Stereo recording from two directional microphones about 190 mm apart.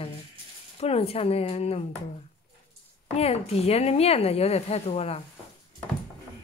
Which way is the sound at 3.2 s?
30° left (ahead or behind).